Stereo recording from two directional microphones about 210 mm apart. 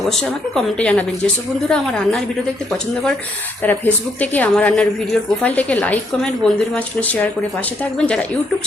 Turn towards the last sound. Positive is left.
turn(degrees=5)  # may be behind; listen again after turning